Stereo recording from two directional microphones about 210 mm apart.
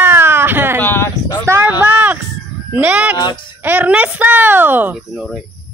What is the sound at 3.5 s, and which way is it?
Speech, 10° right (ahead or behind).